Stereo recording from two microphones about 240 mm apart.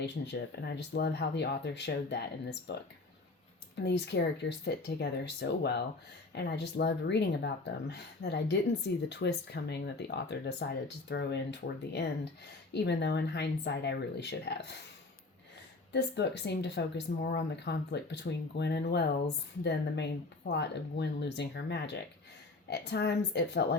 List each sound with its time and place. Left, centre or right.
0.2 s speech: left
3.8 s speech: left
15.9 s speech: left